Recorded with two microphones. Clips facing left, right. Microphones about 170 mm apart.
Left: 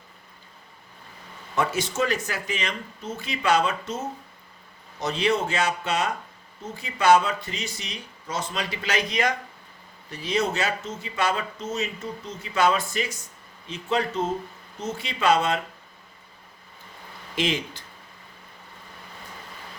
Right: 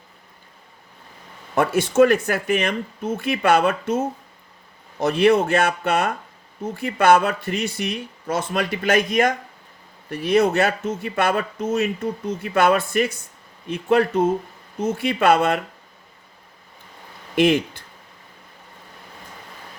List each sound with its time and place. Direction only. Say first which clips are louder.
1.5 s speech: right 9 dB; 55° right (ahead or behind)
17.3 s speech: right 9 dB; 55° right (ahead or behind)